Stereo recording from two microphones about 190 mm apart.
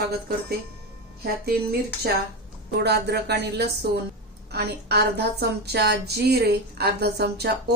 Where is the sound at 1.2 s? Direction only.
55° right (ahead or behind).